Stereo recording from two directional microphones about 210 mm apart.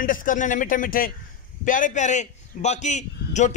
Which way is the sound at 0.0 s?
40° left (ahead or behind).